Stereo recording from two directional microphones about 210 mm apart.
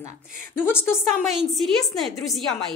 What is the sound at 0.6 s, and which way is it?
Speech, 10° left (ahead or behind).